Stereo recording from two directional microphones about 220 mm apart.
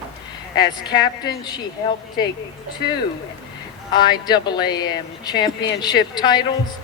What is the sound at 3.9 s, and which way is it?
Speech, 20° left (ahead or behind).